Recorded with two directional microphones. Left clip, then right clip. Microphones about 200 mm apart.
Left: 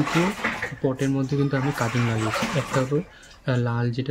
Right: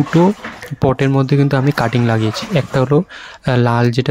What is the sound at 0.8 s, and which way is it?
Speech, 45° right (ahead or behind).